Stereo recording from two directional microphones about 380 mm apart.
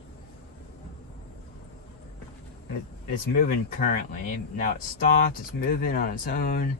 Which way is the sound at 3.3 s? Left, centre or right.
Left.